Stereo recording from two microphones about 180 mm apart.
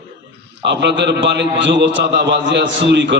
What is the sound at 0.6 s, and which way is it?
A man's voice, 75° right (ahead or behind).